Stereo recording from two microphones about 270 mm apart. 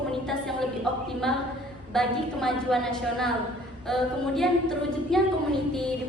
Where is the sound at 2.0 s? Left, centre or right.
Centre.